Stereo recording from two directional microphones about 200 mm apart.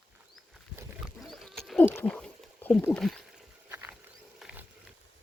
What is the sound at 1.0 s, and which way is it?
Wild animals, centre (ahead or behind).